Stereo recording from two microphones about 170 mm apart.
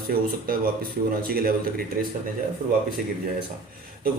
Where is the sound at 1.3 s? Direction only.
60° right (ahead or behind).